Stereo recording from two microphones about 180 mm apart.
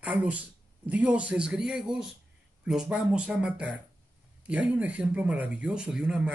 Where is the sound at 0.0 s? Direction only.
5° right (ahead or behind).